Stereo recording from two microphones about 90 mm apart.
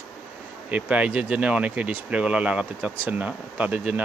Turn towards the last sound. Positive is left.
turn(degrees=-15)  # may be behind; listen again after turning